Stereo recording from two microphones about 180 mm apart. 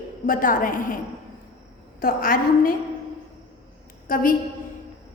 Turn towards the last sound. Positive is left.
turn(degrees=50)  # may be behind; listen again after turning